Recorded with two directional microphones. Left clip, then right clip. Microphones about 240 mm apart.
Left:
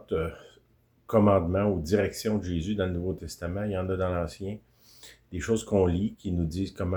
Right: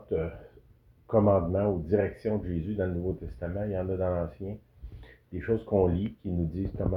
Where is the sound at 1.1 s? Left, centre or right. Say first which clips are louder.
Left 1 dB; centre.